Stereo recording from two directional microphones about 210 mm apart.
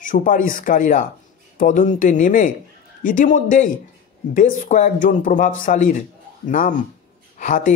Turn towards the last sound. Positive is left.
turn(degrees=40)  # may be behind; listen again after turning